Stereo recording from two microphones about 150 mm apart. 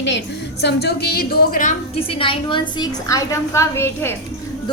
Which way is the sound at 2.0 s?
35° left (ahead or behind).